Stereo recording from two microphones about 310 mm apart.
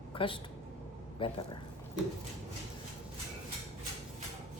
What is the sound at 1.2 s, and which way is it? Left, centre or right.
Speech, centre.